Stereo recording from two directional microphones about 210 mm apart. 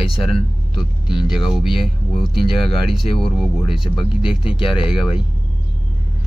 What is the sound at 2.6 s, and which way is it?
Speech, centre (ahead or behind).